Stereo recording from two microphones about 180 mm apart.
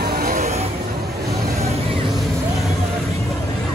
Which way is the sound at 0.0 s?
55° right (ahead or behind).